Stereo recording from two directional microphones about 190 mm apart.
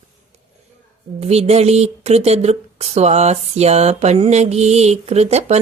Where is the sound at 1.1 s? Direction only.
35° right (ahead or behind).